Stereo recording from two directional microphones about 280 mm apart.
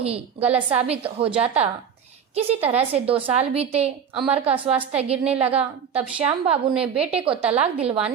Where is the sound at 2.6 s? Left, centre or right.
Right.